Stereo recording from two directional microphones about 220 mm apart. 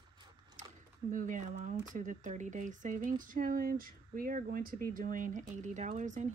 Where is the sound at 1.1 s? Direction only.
35° right (ahead or behind).